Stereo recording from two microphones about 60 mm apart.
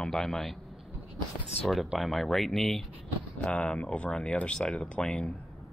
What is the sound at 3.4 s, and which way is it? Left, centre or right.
Speech, left.